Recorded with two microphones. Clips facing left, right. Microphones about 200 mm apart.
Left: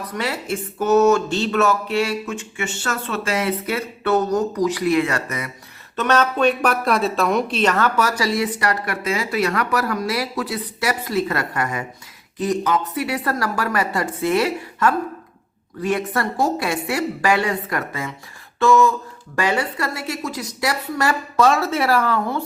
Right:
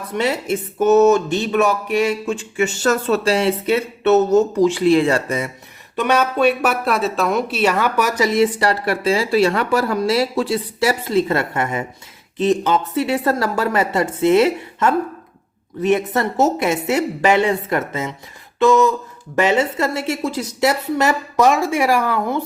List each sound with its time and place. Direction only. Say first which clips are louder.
0.1 s speech: right 6 dB; 25° right (ahead or behind)
2.2 s speech: right 7 dB; 30° right (ahead or behind)
6.0 s speech: right 2 dB; 10° right (ahead or behind)